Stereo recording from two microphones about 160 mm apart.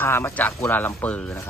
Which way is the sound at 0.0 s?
15° left (ahead or behind).